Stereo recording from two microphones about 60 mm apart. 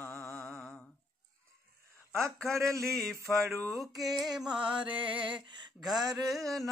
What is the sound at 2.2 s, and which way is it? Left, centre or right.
Speech, right.